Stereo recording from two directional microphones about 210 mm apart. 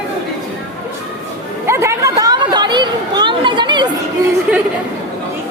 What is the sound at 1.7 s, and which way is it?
Chatter, 15° right (ahead or behind).